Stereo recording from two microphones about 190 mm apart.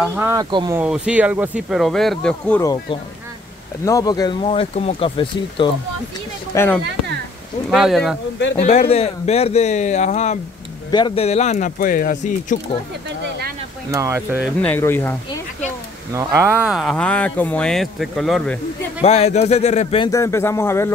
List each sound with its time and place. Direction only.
0.0 s speech: 10° right (ahead or behind)
0.7 s speech: 5° right (ahead or behind)
2.6 s speech: 20° left (ahead or behind)
6.5 s speech: 10° left (ahead or behind)
7.7 s speech: centre (ahead or behind)
8.5 s speech: 35° left (ahead or behind)
10.9 s speech: 25° left (ahead or behind); by 12.5 s 40° left (ahead or behind)
13.9 s speech: 15° right (ahead or behind)
14.4 s speech: 5° left (ahead or behind)
16.1 s speech: 15° right (ahead or behind); by 18.9 s 5° left (ahead or behind)
18.9 s speech: 35° left (ahead or behind)
20.1 s speech: 15° left (ahead or behind)